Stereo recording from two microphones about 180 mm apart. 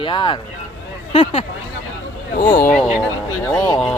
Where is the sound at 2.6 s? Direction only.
5° left (ahead or behind).